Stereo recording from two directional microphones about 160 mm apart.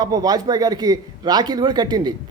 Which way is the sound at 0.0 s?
25° right (ahead or behind).